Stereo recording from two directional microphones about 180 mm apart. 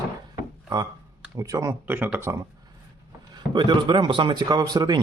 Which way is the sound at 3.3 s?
25° right (ahead or behind).